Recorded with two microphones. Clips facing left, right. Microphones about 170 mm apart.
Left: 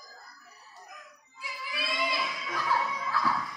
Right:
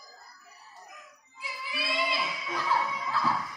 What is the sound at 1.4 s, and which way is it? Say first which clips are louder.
Music: right 1 dB; 20° right (ahead or behind).